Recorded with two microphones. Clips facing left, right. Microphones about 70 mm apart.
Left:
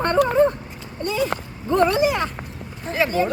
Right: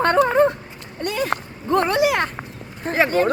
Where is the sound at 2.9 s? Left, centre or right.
Right.